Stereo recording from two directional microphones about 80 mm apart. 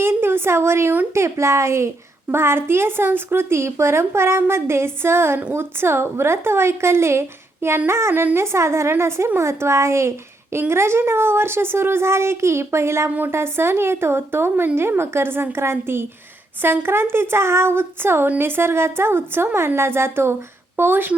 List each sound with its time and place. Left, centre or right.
0.0 s a woman's voice: right